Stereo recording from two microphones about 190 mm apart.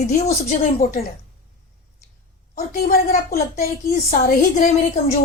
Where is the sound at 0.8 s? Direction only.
45° left (ahead or behind).